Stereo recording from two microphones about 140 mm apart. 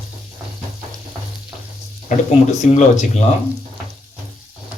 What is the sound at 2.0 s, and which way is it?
Speech, 55° left (ahead or behind).